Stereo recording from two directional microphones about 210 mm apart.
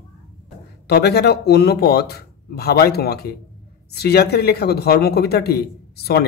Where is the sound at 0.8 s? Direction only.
50° left (ahead or behind).